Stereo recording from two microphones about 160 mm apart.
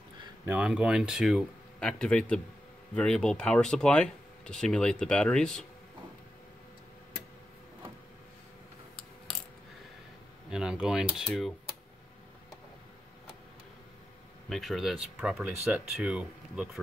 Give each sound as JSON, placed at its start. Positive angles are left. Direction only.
{"t": 0.5, "sound": "speech", "side_deg": -5}
{"t": 10.5, "sound": "speech", "side_deg": -5}
{"t": 14.5, "sound": "speech", "side_deg": 0}